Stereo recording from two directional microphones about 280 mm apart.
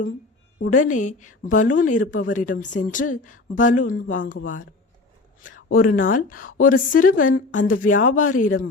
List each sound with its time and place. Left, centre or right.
0.8 s speech: left